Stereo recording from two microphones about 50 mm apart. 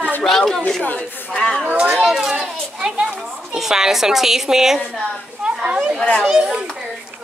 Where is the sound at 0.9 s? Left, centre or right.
Left.